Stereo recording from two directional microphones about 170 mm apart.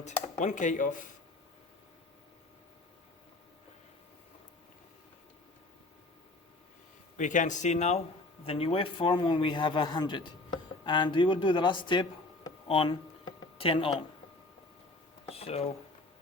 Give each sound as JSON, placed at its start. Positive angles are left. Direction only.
{"t": 0.0, "sound": "speech", "side_deg": 45}
{"t": 7.2, "sound": "a man's voice", "side_deg": 45}
{"t": 15.3, "sound": "speech", "side_deg": 35}